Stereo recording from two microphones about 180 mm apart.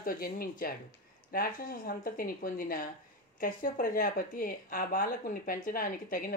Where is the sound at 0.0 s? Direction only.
55° left (ahead or behind).